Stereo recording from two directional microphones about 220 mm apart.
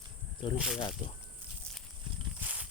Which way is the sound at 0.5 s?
Centre (ahead or behind).